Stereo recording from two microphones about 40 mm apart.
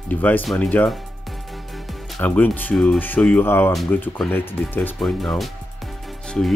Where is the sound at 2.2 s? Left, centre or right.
Left.